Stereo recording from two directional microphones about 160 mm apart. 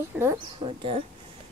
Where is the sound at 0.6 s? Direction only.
35° right (ahead or behind).